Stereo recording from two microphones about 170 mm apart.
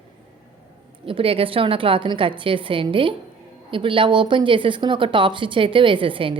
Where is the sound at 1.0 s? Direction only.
30° right (ahead or behind).